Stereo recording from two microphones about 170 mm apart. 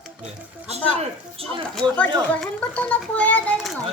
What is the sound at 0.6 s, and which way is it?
Speech, 40° right (ahead or behind).